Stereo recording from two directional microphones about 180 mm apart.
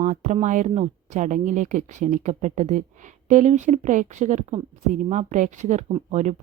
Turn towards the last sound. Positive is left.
turn(degrees=-40)  # may be behind; listen again after turning